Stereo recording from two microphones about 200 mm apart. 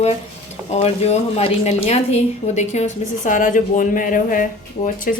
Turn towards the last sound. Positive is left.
turn(degrees=40)  # may be behind; listen again after turning